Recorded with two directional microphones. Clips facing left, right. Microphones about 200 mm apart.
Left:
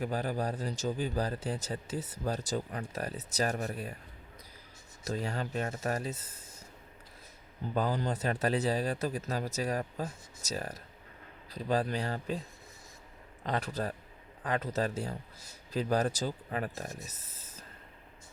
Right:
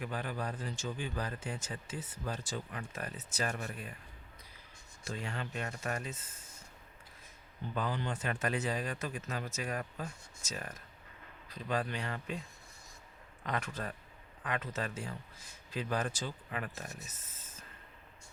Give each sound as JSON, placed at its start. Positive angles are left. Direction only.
{"t": 0.0, "sound": "speech", "side_deg": 40}
{"t": 5.0, "sound": "speech", "side_deg": 40}
{"t": 7.7, "sound": "speech", "side_deg": 40}
{"t": 13.4, "sound": "speech", "side_deg": 35}